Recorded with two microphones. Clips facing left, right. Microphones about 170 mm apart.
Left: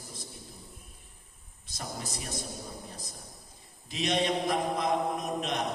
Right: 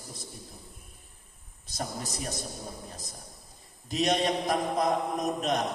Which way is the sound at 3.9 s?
40° right (ahead or behind).